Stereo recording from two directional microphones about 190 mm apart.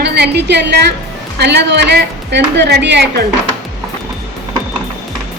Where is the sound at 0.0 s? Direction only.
60° right (ahead or behind).